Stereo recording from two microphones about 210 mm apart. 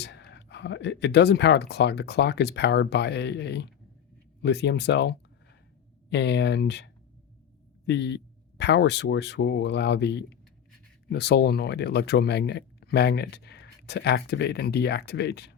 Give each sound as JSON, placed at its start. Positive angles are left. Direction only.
{"t": 0.0, "sound": "speech", "side_deg": 55}